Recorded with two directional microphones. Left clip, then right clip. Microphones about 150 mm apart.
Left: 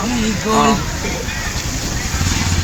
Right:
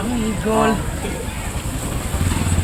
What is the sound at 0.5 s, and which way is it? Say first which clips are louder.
Speech: left 3 dB; 25° left (ahead or behind).